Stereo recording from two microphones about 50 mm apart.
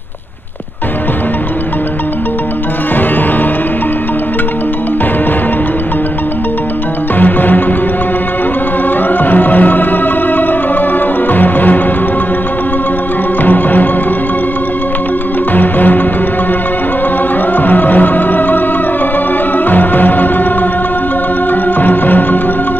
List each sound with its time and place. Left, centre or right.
7.2 s music: left
9.2 s music: left
11.3 s music: left
13.4 s music: left
15.5 s music: left
17.6 s music: left
19.6 s music: left
21.7 s music: left